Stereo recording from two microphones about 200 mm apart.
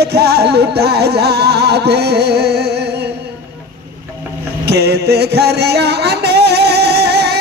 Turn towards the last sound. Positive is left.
turn(degrees=-55)  # may be behind; listen again after turning